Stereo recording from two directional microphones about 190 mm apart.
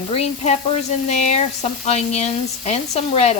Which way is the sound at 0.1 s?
35° left (ahead or behind).